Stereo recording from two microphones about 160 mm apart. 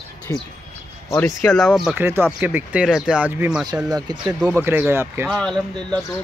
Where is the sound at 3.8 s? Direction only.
25° right (ahead or behind).